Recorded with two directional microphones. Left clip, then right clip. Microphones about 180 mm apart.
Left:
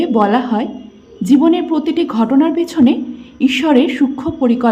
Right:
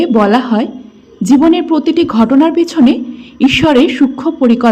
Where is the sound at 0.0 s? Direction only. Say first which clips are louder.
Right 3 dB; 15° right (ahead or behind).